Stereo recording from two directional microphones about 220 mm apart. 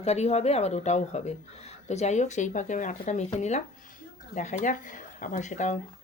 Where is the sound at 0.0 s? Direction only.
30° left (ahead or behind).